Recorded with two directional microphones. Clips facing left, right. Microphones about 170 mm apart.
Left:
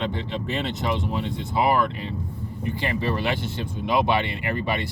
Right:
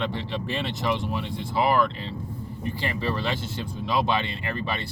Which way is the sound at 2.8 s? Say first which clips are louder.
Left 3 dB; 15° left (ahead or behind).